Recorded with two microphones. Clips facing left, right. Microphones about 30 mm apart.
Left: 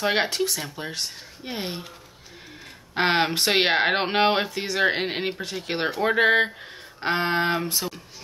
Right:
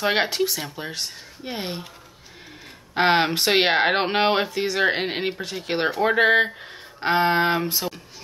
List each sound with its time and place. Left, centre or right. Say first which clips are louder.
0.0 s speech: right 2 dB; centre
2.9 s speech: right 3 dB; centre